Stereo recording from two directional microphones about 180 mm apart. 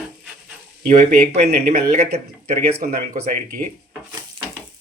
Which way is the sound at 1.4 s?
60° right (ahead or behind).